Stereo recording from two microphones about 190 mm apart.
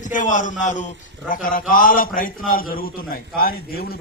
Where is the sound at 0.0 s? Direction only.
40° left (ahead or behind).